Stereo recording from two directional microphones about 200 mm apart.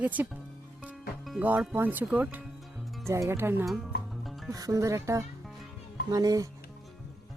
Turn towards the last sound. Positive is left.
turn(degrees=-20)  # may be behind; listen again after turning